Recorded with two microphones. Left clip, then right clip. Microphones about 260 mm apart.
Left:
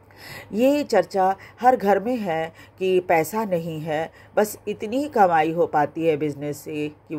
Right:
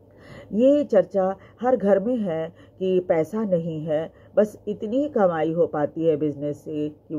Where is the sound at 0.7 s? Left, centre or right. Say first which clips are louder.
Right 2 dB; left.